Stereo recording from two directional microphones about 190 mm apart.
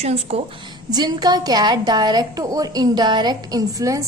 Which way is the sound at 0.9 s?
20° right (ahead or behind).